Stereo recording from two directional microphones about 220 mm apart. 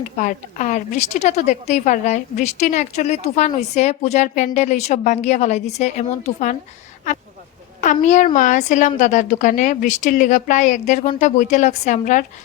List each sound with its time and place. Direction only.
0.2 s a woman's voice: 35° left (ahead or behind)
7.8 s a woman's voice: 35° left (ahead or behind)